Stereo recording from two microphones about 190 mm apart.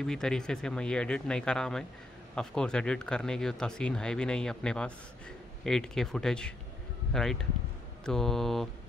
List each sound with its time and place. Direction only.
0.0 s speech: 5° left (ahead or behind)